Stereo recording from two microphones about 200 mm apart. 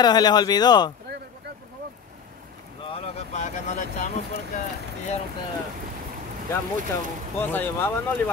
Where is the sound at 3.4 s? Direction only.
35° left (ahead or behind).